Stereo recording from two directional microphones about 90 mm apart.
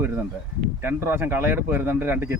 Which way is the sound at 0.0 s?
25° right (ahead or behind).